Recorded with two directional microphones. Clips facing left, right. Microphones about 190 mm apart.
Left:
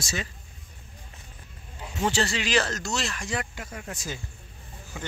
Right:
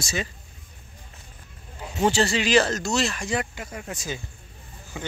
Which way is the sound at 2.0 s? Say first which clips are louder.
Right 5 dB; 30° right (ahead or behind).